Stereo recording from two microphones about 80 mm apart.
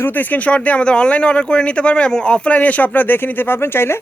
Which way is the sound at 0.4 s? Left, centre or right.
Centre.